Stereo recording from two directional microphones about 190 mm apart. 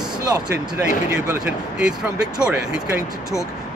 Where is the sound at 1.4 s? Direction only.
5° right (ahead or behind).